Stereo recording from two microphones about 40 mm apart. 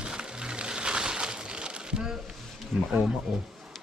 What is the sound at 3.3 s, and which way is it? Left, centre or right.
Speech, centre.